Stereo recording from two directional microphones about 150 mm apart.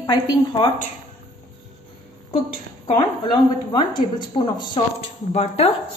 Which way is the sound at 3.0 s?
30° left (ahead or behind).